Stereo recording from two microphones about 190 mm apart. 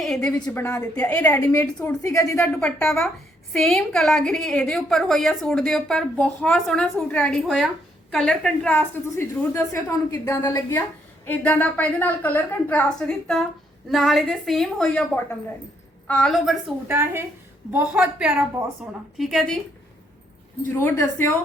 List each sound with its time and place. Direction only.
0.0 s a woman's voice: centre (ahead or behind)
2.5 s a woman's voice: 5° left (ahead or behind)
16.9 s a woman's voice: 15° right (ahead or behind)
20.7 s a woman's voice: 15° left (ahead or behind)